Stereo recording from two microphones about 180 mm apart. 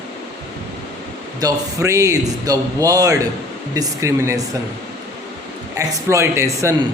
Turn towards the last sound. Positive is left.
turn(degrees=-15)  # may be behind; listen again after turning